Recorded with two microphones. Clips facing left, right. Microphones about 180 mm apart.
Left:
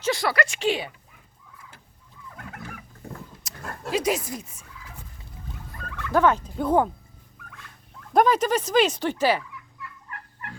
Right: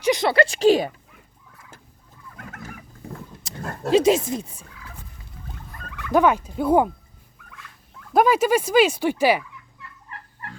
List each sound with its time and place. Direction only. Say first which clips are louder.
0.0 s a woman's voice: right 5 dB; 20° right (ahead or behind); by 0.9 s 40° right (ahead or behind)
3.4 s speech: right 7 dB; 25° right (ahead or behind)
6.1 s speech: right 2 dB; 15° right (ahead or behind)
8.1 s speech: right 2 dB; 5° right (ahead or behind)